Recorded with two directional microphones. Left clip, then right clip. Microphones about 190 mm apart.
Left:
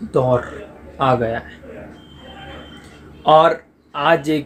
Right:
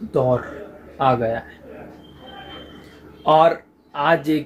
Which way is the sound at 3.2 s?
15° left (ahead or behind).